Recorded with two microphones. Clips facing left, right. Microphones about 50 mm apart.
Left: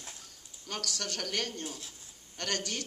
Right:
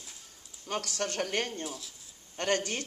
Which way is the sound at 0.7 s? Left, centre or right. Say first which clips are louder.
Right 4 dB; right.